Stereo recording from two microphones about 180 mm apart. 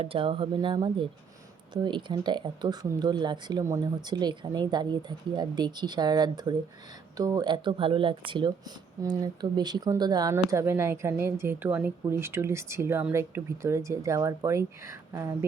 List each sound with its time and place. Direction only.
0.0 s speech: 30° right (ahead or behind)